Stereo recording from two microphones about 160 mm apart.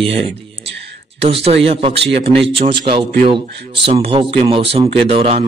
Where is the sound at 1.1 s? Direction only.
40° right (ahead or behind).